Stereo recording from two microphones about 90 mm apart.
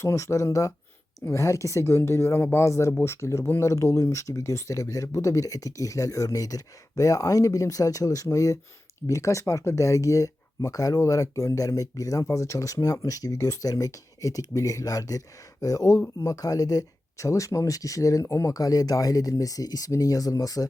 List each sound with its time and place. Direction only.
0.0 s speech: 35° left (ahead or behind)